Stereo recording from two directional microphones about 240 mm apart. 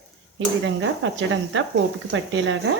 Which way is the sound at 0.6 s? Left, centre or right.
Right.